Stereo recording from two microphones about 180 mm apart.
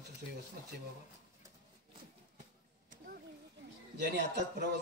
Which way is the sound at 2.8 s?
55° right (ahead or behind).